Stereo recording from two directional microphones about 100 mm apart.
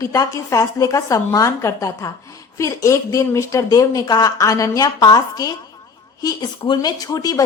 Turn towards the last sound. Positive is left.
turn(degrees=35)  # may be behind; listen again after turning